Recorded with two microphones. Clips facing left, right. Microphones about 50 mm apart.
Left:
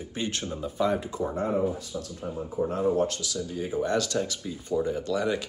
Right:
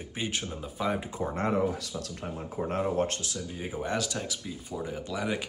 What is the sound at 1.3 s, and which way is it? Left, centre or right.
Speech, right.